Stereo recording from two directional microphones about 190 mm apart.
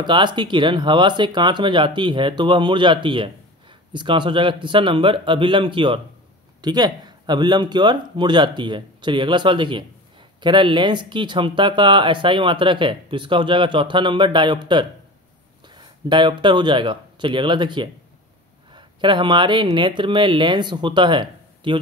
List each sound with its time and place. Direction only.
0.0 s speech: 25° right (ahead or behind)